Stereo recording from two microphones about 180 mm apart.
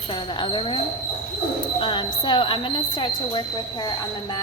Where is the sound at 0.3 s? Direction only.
25° left (ahead or behind).